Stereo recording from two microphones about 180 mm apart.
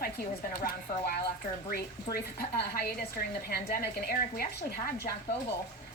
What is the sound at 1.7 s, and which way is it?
Speech, 55° left (ahead or behind).